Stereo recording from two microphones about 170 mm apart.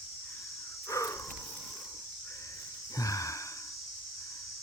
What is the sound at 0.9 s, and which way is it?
Cricket, 20° left (ahead or behind).